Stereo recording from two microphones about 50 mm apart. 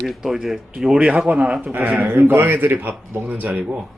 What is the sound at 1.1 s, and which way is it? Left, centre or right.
Speech, right.